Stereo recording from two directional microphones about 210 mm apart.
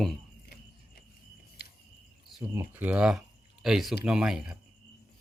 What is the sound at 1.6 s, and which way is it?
Cricket, 50° left (ahead or behind).